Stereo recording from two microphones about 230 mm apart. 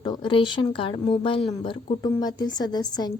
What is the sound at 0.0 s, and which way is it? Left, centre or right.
A woman's voice, centre.